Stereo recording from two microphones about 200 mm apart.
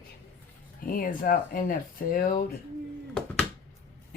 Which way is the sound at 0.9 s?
45° left (ahead or behind).